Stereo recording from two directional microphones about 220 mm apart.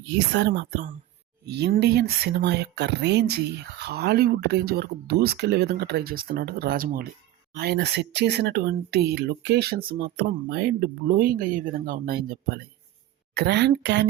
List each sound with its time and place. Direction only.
0.1 s speech: 50° right (ahead or behind)